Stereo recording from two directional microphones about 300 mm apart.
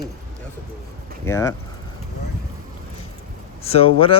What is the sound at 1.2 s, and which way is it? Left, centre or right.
Speech, centre.